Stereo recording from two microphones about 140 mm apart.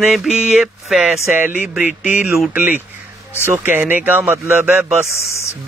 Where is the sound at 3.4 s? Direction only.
15° right (ahead or behind).